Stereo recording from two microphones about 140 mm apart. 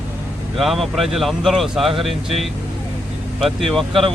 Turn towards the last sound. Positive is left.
turn(degrees=0)  # may be behind; listen again after turning